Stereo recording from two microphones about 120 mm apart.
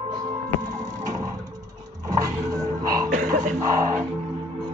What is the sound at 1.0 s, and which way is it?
Music, 30° right (ahead or behind).